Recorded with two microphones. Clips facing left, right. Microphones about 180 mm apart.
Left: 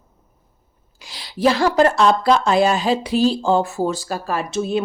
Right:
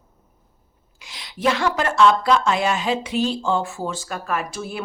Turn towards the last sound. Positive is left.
turn(degrees=25)  # may be behind; listen again after turning